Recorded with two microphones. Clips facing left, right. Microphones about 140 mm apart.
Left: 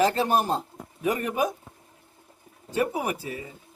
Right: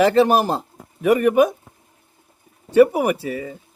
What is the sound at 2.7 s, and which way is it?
Speech, 70° right (ahead or behind).